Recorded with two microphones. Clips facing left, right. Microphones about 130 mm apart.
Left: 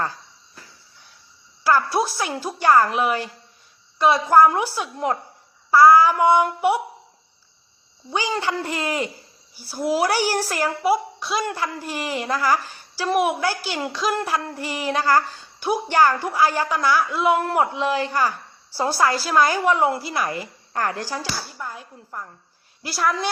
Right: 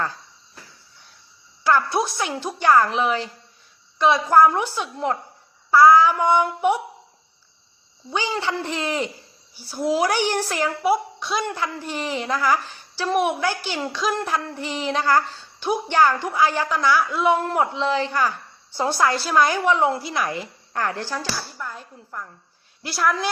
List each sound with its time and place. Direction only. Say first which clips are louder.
1.6 s speech: even; centre (ahead or behind)
3.9 s child singing: left 1 dB; 5° left (ahead or behind)
8.1 s child singing: left 1 dB; 10° left (ahead or behind)
9.6 s speech: even; centre (ahead or behind)
20.7 s child singing: left 1 dB; 10° left (ahead or behind)
22.8 s speech: even; centre (ahead or behind)